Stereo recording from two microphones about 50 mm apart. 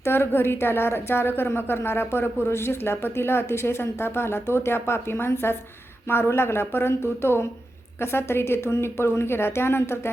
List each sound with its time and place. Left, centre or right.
0.0 s a woman's voice: left